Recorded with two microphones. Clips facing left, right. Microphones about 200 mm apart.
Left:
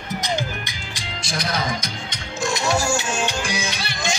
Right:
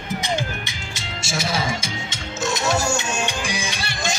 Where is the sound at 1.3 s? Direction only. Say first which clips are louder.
Right 1 dB; 5° right (ahead or behind).